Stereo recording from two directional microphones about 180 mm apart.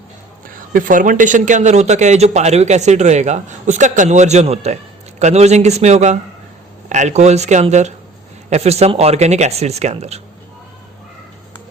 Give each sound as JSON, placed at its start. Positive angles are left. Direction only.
{"t": 0.4, "sound": "a man's voice", "side_deg": -50}